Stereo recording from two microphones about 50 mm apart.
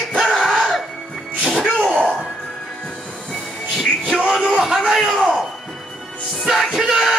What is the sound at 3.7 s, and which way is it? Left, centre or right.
Music, centre.